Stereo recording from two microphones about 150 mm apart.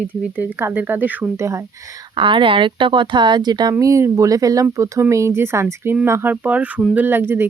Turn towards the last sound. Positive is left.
turn(degrees=-15)  # may be behind; listen again after turning